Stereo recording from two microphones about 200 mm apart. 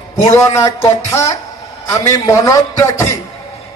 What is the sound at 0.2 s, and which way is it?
A man's voice, 15° left (ahead or behind).